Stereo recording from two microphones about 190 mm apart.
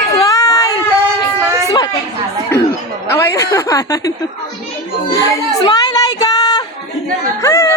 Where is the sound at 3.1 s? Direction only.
15° left (ahead or behind).